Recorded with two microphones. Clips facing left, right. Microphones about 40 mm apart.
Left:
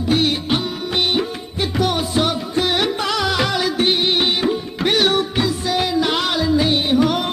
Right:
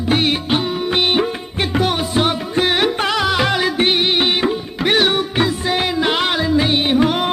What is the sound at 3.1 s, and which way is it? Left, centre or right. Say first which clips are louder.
Music: right 2 dB; centre.